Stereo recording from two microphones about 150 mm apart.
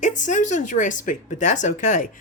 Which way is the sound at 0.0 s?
55° left (ahead or behind).